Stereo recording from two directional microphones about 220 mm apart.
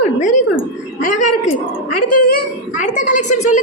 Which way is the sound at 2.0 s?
90° left.